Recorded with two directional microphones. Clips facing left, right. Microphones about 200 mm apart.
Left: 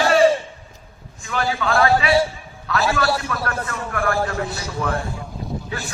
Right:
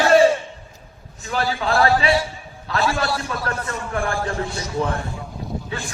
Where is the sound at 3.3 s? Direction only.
30° right (ahead or behind).